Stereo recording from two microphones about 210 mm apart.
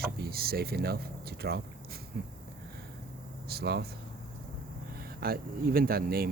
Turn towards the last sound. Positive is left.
turn(degrees=-45)  # may be behind; listen again after turning